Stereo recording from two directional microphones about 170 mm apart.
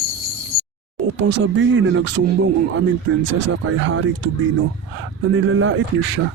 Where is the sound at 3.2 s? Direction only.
90° right.